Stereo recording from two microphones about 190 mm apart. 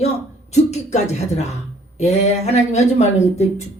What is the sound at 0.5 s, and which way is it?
Speech, 35° left (ahead or behind).